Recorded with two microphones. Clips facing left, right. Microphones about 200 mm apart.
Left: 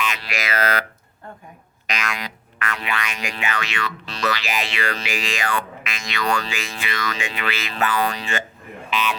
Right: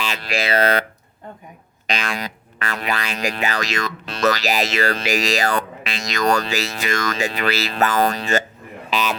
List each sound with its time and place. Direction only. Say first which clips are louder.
0.3 s speech: right 7 dB; 30° right (ahead or behind)
1.9 s music: right 3 dB; 30° right (ahead or behind)
8.9 s speech: right 2 dB; 40° right (ahead or behind)